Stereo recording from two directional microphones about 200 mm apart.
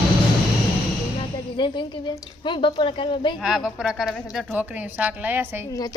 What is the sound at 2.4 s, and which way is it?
Speech, 25° left (ahead or behind).